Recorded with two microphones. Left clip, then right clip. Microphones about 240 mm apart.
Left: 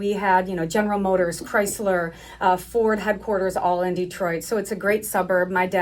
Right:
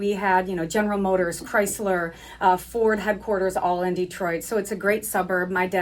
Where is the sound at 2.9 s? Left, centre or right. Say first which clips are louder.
Left 1 dB; centre.